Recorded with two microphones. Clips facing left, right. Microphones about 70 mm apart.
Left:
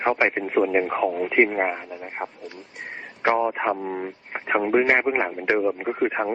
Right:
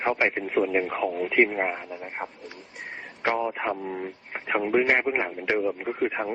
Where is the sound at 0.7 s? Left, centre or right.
Left.